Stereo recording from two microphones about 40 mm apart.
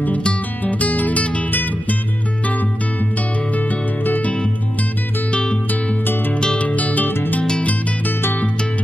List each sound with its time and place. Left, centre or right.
0.7 s guitar: left
1.5 s music: left
3.5 s music: left
5.3 s music: left
6.6 s music: left